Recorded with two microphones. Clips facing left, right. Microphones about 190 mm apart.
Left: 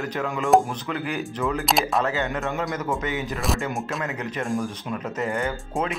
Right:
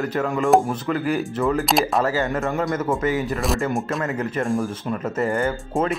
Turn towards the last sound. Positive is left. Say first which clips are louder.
# right 5 dB
turn(degrees=0)  # may be behind; listen again after turning